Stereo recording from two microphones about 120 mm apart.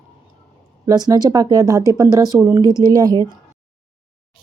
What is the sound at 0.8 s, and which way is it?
A woman's voice, 30° right (ahead or behind).